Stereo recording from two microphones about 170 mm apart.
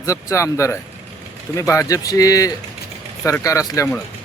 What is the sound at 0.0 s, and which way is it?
A man's voice, 20° left (ahead or behind).